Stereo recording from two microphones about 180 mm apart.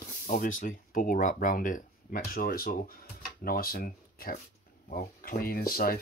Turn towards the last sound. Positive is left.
turn(degrees=55)  # may be behind; listen again after turning